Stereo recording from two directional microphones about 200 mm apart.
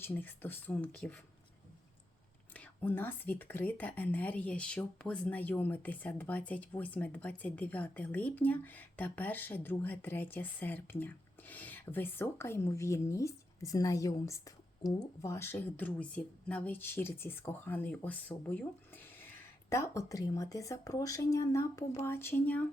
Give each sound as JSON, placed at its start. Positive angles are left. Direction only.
{"t": 0.0, "sound": "speech", "side_deg": 10}
{"t": 2.5, "sound": "speech", "side_deg": 10}